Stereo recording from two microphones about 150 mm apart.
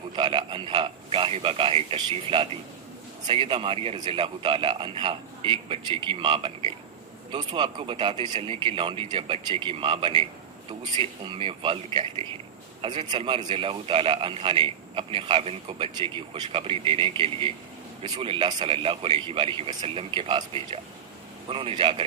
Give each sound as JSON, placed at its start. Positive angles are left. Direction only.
{"t": 0.2, "sound": "a man's voice", "side_deg": -35}